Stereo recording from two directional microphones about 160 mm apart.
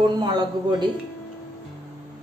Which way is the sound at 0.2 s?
25° right (ahead or behind).